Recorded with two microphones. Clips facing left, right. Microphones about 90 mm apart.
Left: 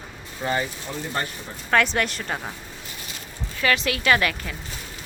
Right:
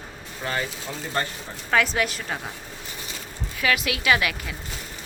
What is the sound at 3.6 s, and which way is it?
Speech, 5° right (ahead or behind).